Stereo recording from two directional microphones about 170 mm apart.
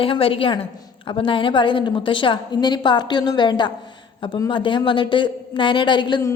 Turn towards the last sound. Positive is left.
turn(degrees=20)  # may be behind; listen again after turning